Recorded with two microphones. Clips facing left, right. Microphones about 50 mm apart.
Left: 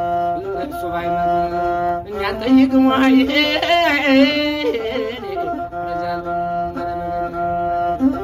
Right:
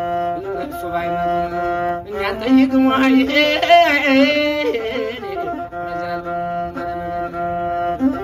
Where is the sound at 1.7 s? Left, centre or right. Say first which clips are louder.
Left 1 dB; right.